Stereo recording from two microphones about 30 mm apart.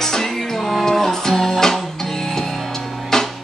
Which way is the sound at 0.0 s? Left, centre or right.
Centre.